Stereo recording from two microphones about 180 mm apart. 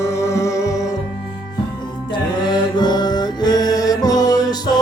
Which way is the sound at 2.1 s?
25° left (ahead or behind).